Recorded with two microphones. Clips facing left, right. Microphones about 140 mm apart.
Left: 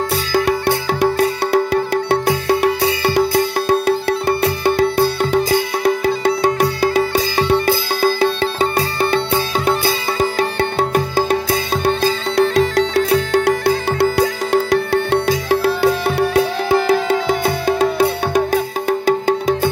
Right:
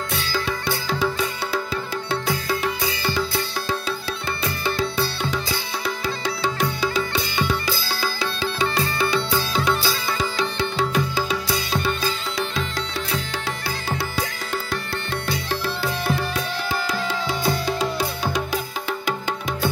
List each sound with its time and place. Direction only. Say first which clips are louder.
0.3 s music: left 10 dB; 60° left (ahead or behind)
16.8 s music: left 10 dB; 55° left (ahead or behind); by 19.7 s 40° left (ahead or behind)